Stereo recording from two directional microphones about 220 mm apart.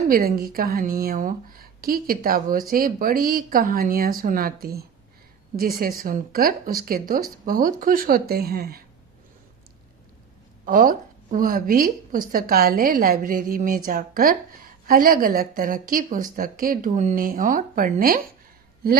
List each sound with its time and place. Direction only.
0.1 s a woman's voice: 45° right (ahead or behind)
10.7 s a woman's voice: 40° right (ahead or behind)